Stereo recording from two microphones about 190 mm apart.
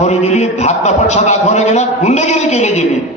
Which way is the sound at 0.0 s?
35° left (ahead or behind).